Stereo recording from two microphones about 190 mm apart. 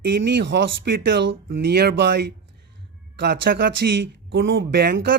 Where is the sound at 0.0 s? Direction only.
65° right (ahead or behind).